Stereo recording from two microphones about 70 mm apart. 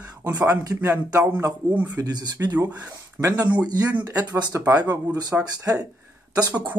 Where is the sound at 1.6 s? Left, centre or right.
Left.